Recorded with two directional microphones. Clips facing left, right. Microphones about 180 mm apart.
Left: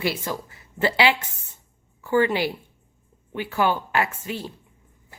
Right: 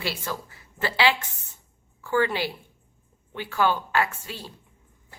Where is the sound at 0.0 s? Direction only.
15° left (ahead or behind).